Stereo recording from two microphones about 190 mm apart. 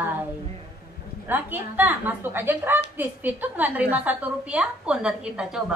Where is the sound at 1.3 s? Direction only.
10° right (ahead or behind).